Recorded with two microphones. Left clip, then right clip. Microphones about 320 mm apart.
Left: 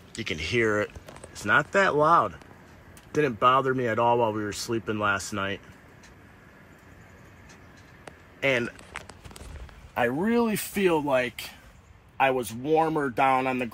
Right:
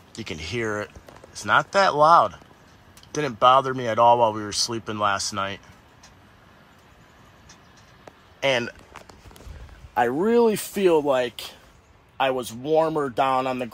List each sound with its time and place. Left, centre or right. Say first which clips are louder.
0.1 s speech: left 3 dB; centre
8.4 s speech: right 3 dB; centre
9.9 s speech: right 5 dB; centre